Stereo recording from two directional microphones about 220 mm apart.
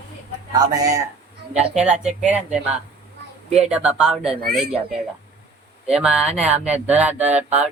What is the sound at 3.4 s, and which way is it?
Speech, 30° right (ahead or behind).